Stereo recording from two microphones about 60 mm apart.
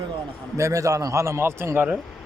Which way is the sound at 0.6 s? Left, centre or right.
Right.